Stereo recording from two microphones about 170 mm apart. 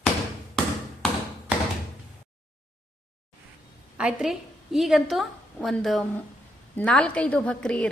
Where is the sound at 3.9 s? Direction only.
5° right (ahead or behind).